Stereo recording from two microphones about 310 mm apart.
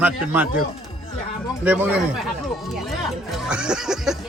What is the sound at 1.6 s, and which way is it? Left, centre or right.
Speech, centre.